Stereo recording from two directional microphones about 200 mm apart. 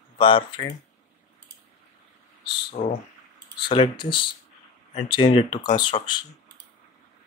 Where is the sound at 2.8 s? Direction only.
35° left (ahead or behind).